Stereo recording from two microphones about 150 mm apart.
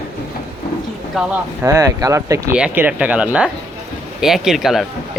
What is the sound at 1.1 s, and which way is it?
Speech, 10° right (ahead or behind).